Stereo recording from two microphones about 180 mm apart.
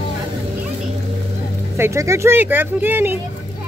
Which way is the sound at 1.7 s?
15° right (ahead or behind).